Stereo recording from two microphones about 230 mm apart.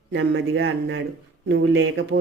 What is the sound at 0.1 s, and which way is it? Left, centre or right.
Speech, right.